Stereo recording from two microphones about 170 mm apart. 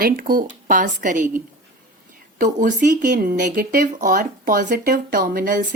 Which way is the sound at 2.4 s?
50° right (ahead or behind).